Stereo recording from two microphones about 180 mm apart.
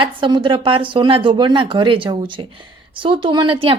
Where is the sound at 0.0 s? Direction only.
25° right (ahead or behind).